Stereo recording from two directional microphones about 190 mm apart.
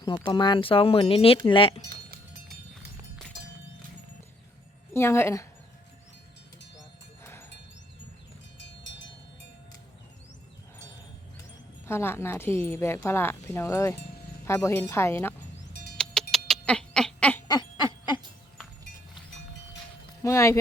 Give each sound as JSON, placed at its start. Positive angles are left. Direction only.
{"t": 0.2, "sound": "speech", "side_deg": 25}
{"t": 4.9, "sound": "a woman's voice", "side_deg": 15}
{"t": 7.2, "sound": "a sound", "side_deg": 15}
{"t": 8.5, "sound": "music", "side_deg": 70}
{"t": 11.9, "sound": "a woman's voice", "side_deg": 15}
{"t": 15.6, "sound": "music", "side_deg": 60}
{"t": 16.3, "sound": "a sound", "side_deg": 5}
{"t": 17.5, "sound": "a sound", "side_deg": 25}
{"t": 20.2, "sound": "a woman's voice", "side_deg": 15}